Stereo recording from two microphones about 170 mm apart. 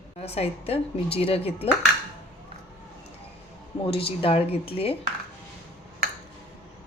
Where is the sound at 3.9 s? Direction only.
35° left (ahead or behind).